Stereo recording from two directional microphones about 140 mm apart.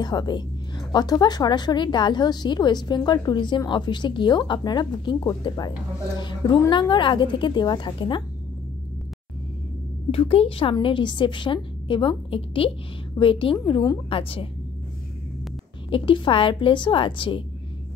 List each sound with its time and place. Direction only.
0.0 s speech: 30° left (ahead or behind)
10.1 s speech: 45° left (ahead or behind)
15.9 s speech: 40° left (ahead or behind)